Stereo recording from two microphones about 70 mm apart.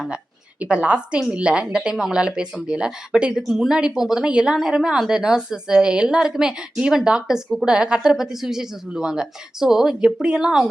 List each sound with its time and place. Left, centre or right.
0.6 s speech: centre